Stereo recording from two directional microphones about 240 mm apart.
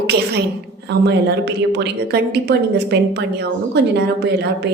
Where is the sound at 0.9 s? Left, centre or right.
Right.